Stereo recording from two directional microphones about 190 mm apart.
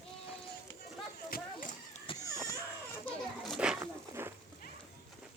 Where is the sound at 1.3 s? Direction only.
50° left (ahead or behind).